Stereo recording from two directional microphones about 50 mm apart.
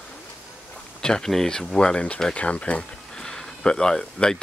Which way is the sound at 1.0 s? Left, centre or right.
Centre.